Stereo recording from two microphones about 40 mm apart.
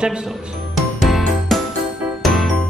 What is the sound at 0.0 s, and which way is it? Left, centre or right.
Speech, right.